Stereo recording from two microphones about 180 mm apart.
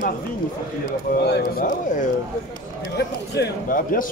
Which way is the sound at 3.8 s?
50° left (ahead or behind).